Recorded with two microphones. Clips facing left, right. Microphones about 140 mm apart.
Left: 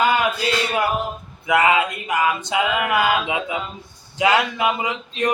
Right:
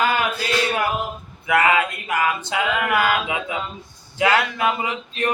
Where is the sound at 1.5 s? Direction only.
20° left (ahead or behind).